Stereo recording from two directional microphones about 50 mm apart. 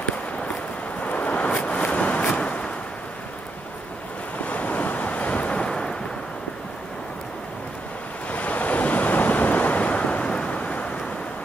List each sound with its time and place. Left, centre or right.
1.0 s a sound: left
4.5 s waves: left
8.3 s waves: left